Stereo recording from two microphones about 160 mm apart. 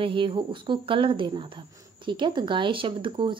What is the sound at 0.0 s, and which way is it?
Speech, 35° right (ahead or behind).